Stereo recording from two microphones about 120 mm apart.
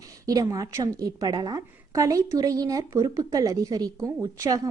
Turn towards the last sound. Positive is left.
turn(degrees=-30)  # may be behind; listen again after turning